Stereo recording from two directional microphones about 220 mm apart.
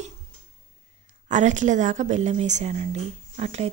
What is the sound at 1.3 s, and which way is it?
A woman's voice, 35° right (ahead or behind).